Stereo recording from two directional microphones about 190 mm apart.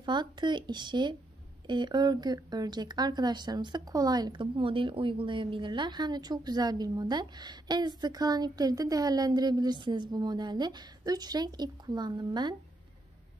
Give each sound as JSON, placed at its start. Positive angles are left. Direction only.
{"t": 0.0, "sound": "speech", "side_deg": -25}